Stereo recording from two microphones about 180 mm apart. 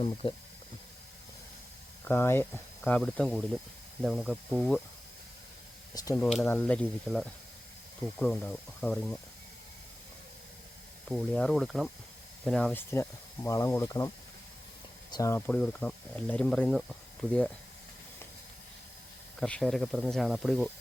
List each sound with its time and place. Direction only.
0.0 s speech: 30° left (ahead or behind)
2.0 s speech: 15° left (ahead or behind)
6.1 s speech: centre (ahead or behind)
11.1 s speech: centre (ahead or behind); by 14.1 s 15° left (ahead or behind)
15.1 s speech: 15° left (ahead or behind); by 16.8 s centre (ahead or behind)
19.4 s speech: 5° left (ahead or behind)